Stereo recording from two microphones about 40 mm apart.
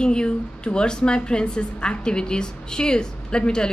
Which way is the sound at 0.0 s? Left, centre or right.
Left.